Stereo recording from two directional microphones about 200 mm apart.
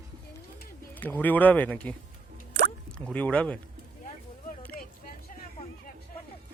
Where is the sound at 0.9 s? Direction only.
10° left (ahead or behind).